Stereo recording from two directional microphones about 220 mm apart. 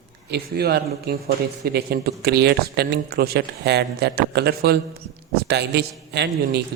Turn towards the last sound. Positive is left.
turn(degrees=-50)  # may be behind; listen again after turning